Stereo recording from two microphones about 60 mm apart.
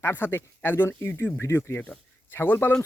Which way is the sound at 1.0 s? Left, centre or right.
Left.